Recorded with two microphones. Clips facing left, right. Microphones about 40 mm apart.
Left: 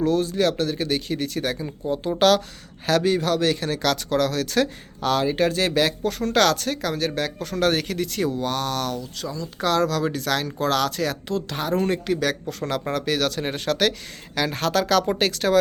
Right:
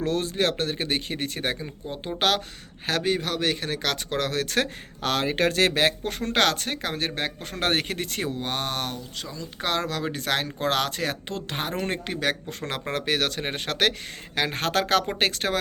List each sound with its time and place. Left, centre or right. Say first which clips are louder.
0.0 s speech: left 4 dB; right
9.2 s speech: left 5 dB; right